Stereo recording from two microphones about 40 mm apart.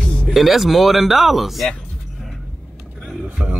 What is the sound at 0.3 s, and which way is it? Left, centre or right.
Speech, centre.